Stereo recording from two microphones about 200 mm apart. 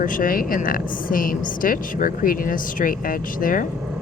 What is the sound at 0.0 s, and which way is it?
A woman's voice, 45° left (ahead or behind).